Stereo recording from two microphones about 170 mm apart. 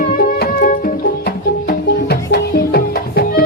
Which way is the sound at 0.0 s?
55° left (ahead or behind).